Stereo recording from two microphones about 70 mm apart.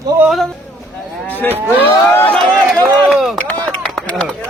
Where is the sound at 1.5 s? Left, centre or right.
Right.